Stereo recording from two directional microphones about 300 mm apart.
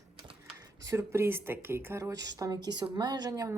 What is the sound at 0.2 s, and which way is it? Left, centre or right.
A woman's voice, centre.